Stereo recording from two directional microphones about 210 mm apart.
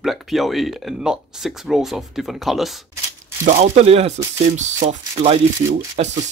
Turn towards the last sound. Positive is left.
turn(degrees=-30)  # may be behind; listen again after turning